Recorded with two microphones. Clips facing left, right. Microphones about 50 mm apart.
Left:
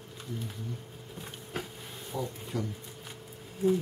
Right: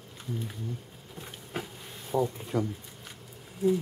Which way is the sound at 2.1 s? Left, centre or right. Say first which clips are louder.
Right 7 dB; right.